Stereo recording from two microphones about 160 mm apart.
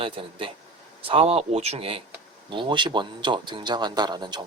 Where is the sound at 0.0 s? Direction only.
35° right (ahead or behind).